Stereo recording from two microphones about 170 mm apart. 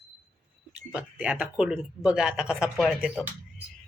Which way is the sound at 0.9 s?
5° right (ahead or behind).